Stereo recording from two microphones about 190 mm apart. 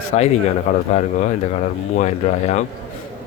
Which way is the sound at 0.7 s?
40° left (ahead or behind).